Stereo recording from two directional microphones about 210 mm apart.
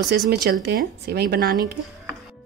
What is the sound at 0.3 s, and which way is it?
Speech, 50° right (ahead or behind).